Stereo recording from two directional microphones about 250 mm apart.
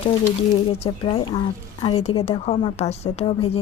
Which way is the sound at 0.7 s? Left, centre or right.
Left.